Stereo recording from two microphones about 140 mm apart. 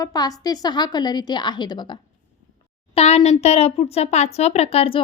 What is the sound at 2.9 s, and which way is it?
Speech, 50° left (ahead or behind).